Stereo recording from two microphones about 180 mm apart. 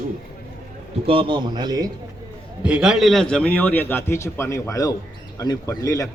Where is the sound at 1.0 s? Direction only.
30° right (ahead or behind).